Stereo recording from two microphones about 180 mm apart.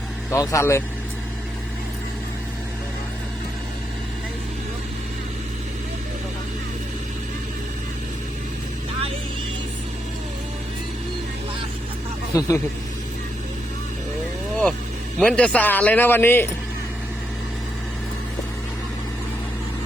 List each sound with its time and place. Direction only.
0.3 s a man's voice: 15° left (ahead or behind)
12.3 s speech: 20° left (ahead or behind)
15.2 s a man's voice: 5° left (ahead or behind)